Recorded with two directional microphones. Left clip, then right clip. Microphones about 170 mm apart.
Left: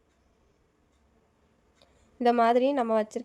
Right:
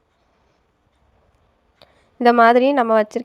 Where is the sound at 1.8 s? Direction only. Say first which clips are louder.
Right 10 dB; 20° right (ahead or behind).